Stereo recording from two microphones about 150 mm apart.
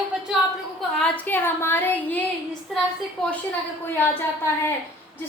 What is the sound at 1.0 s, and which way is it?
A woman's voice, 10° left (ahead or behind).